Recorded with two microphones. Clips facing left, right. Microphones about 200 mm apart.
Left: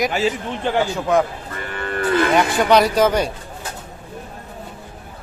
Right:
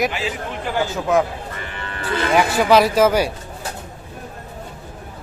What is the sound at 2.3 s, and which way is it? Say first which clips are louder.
A man's voice: right 3 dB; 5° right (ahead or behind).